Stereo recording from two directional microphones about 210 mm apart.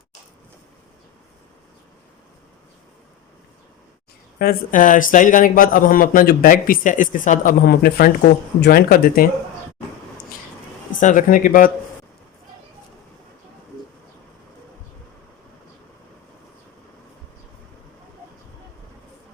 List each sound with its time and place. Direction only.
4.4 s a man's voice: 40° left (ahead or behind)
11.0 s a man's voice: 40° left (ahead or behind)